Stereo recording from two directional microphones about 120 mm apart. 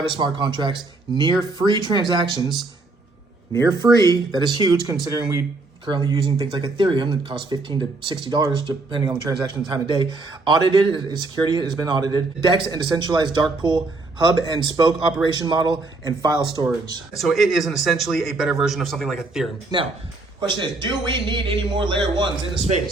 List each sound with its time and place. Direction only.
0.1 s a man's voice: 40° right (ahead or behind)
3.6 s a man's voice: 30° right (ahead or behind)
17.2 s a man's voice: centre (ahead or behind)
19.7 s a man's voice: 35° right (ahead or behind)